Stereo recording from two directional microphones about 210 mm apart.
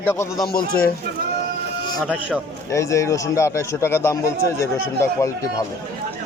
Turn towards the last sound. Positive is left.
turn(degrees=15)  # may be behind; listen again after turning